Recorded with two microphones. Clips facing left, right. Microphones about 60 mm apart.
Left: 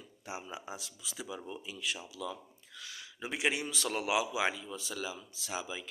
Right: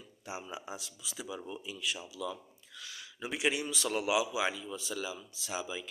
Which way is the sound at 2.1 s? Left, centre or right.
Left.